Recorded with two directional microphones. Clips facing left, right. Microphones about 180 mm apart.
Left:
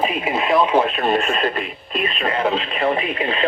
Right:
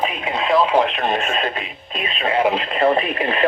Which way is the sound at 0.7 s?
20° right (ahead or behind).